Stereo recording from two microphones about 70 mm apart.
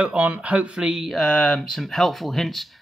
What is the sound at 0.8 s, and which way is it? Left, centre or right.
Speech, centre.